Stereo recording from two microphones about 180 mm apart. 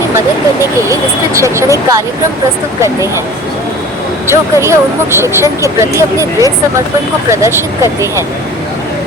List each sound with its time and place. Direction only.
1.4 s speech: 15° right (ahead or behind)
4.3 s speech: 15° right (ahead or behind)